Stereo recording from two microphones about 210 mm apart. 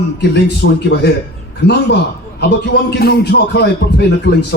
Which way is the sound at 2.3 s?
50° left (ahead or behind).